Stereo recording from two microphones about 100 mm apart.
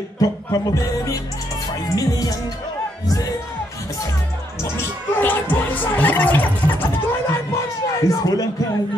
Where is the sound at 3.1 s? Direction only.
40° left (ahead or behind).